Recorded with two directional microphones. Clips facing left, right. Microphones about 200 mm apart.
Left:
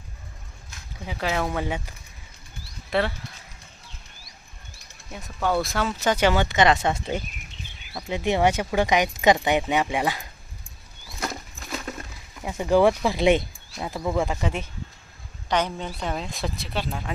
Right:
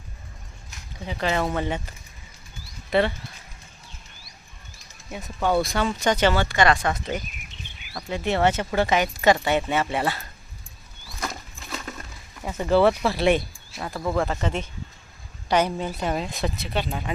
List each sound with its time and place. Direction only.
1.0 s speech: 5° left (ahead or behind)
2.9 s speech: centre (ahead or behind)
5.1 s speech: centre (ahead or behind); by 7.3 s 30° left (ahead or behind)
8.1 s speech: 15° left (ahead or behind)
12.5 s speech: 10° left (ahead or behind)
15.4 s a woman's voice: 10° right (ahead or behind)